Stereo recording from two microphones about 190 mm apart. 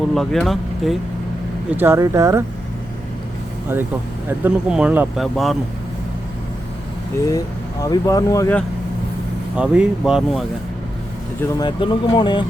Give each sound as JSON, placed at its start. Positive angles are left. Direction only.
{"t": 0.1, "sound": "speech", "side_deg": 0}
{"t": 1.7, "sound": "speech", "side_deg": -10}
{"t": 4.3, "sound": "speech", "side_deg": -5}
{"t": 7.3, "sound": "speech", "side_deg": 20}
{"t": 9.6, "sound": "speech", "side_deg": -5}
{"t": 11.6, "sound": "speech", "side_deg": 25}